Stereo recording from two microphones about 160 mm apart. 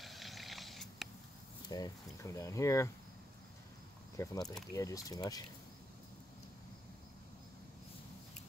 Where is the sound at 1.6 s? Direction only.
25° left (ahead or behind).